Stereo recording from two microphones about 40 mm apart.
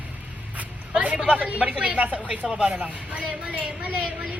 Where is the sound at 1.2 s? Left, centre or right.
Right.